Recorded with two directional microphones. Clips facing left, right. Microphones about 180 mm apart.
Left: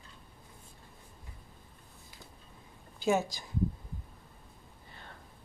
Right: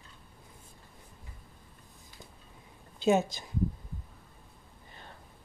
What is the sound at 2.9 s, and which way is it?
Speech, 20° right (ahead or behind).